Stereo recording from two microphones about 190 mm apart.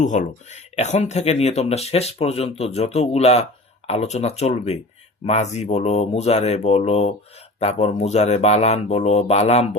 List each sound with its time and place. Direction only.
0.0 s speech: 40° left (ahead or behind)